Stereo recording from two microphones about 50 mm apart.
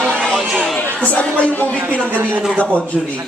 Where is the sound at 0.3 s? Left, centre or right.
Centre.